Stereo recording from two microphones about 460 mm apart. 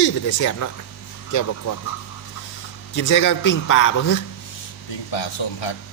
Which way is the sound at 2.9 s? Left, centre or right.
Left.